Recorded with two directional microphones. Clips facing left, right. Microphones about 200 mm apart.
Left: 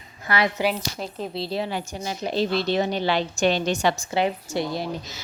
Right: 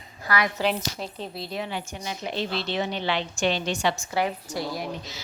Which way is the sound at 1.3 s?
30° left (ahead or behind).